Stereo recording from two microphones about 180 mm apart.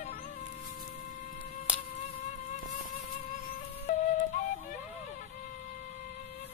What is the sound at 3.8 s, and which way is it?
Flute, 45° left (ahead or behind).